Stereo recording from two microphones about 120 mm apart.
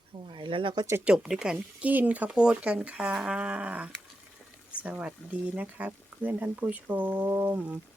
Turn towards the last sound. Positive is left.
turn(degrees=-15)  # may be behind; listen again after turning